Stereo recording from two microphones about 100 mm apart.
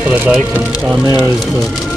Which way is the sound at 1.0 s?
35° right (ahead or behind).